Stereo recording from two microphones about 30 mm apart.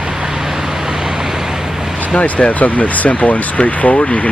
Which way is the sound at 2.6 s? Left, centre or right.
Left.